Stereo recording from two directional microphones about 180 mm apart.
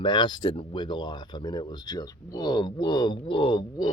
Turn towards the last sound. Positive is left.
turn(degrees=30)  # may be behind; listen again after turning